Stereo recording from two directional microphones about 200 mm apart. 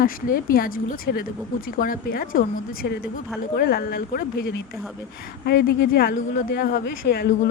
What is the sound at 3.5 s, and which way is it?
Speech, 50° left (ahead or behind).